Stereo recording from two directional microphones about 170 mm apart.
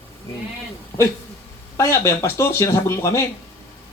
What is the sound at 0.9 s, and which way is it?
A man's voice, 20° left (ahead or behind).